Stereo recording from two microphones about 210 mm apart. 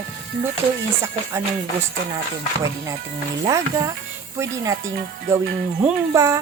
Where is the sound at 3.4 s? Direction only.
15° right (ahead or behind).